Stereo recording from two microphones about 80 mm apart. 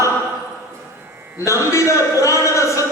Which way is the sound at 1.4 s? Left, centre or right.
Left.